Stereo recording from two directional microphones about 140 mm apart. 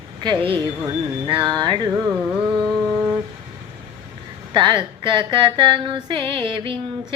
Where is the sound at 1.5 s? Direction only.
30° right (ahead or behind).